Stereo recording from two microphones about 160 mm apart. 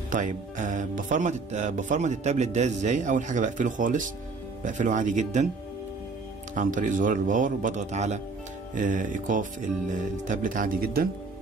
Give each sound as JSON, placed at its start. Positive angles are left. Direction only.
{"t": 0.1, "sound": "speech", "side_deg": -55}
{"t": 6.5, "sound": "speech", "side_deg": -55}